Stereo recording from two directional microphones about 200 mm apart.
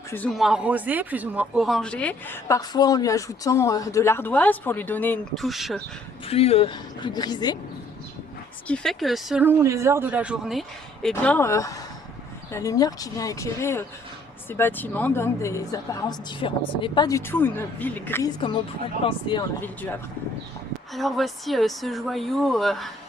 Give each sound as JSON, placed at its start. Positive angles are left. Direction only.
{"t": 0.1, "sound": "speech", "side_deg": 5}
{"t": 6.2, "sound": "a woman's voice", "side_deg": 30}
{"t": 8.6, "sound": "a woman's voice", "side_deg": 5}
{"t": 19.6, "sound": "speech", "side_deg": 10}